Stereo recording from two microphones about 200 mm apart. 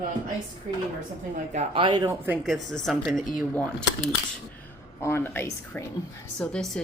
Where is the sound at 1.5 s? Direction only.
25° right (ahead or behind).